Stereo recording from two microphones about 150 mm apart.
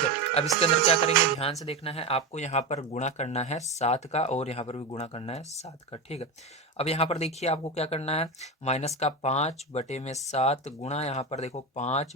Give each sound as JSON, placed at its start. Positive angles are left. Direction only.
{"t": 0.6, "sound": "music", "side_deg": 40}
{"t": 1.6, "sound": "speech", "side_deg": 40}